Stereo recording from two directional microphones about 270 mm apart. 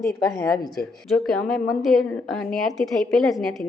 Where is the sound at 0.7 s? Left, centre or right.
Centre.